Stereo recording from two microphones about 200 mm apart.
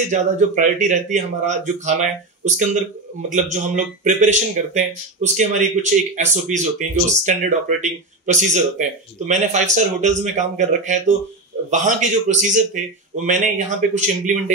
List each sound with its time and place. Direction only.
0.1 s speech: 35° right (ahead or behind)